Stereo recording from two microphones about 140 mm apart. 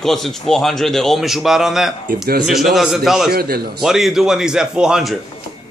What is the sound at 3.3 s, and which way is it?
Speech, 90° right.